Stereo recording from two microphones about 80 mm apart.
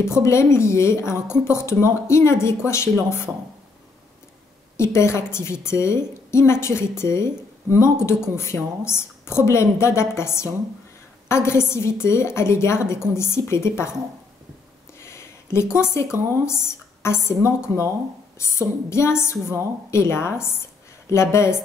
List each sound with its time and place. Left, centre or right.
0.0 s a woman's voice: left
4.7 s a woman's voice: left
15.0 s speech: left
18.4 s a woman's voice: left